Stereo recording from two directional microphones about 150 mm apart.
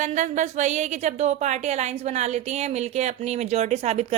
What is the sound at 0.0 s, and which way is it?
A woman's voice, 55° right (ahead or behind).